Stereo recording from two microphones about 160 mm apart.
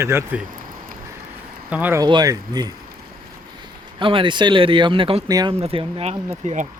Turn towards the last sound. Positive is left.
turn(degrees=-40)  # may be behind; listen again after turning